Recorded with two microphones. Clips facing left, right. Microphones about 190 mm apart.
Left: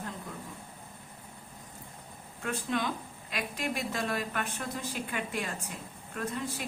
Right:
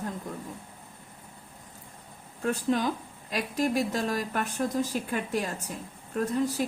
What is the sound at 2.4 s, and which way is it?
A woman's voice, 40° right (ahead or behind).